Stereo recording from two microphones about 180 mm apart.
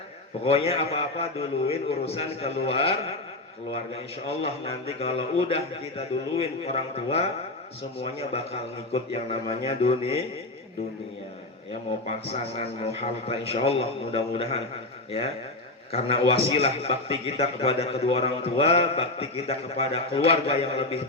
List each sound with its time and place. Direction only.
0.4 s a man's voice: 35° left (ahead or behind)
12.0 s a man's voice: 35° left (ahead or behind)
15.9 s a man's voice: 30° left (ahead or behind)